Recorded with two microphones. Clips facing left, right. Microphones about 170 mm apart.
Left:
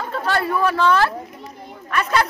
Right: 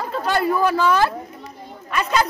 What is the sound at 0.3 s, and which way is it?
Speech, 25° right (ahead or behind).